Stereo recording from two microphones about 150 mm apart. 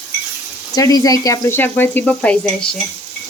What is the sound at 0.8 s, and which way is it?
A woman's voice, 25° left (ahead or behind).